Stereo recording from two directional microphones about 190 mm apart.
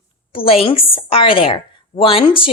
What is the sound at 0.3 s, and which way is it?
A woman's voice, 30° left (ahead or behind).